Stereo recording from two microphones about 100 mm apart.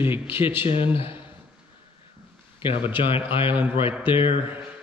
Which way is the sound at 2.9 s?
60° left (ahead or behind).